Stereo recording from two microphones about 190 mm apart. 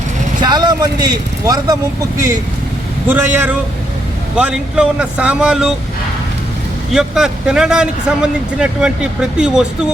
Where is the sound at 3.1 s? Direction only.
10° right (ahead or behind).